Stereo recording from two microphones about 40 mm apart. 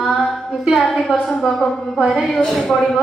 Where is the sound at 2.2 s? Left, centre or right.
Centre.